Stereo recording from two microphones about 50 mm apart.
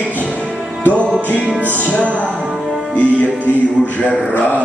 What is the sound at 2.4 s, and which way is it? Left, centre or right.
Music, centre.